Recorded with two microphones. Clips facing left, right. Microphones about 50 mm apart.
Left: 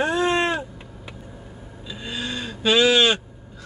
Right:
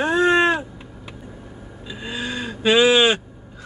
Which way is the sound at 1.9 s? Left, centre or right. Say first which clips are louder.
Right 2 dB; centre.